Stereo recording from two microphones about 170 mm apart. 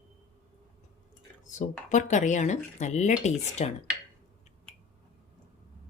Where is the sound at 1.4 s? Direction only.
45° left (ahead or behind).